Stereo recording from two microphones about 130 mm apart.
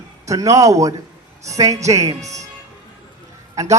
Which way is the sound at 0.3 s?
25° right (ahead or behind).